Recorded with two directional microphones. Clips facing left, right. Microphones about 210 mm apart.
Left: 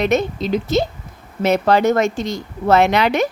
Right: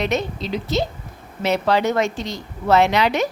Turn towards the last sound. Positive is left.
turn(degrees=55)  # may be behind; listen again after turning